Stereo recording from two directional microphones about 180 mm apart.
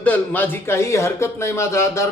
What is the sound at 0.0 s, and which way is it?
A man's voice, 10° left (ahead or behind).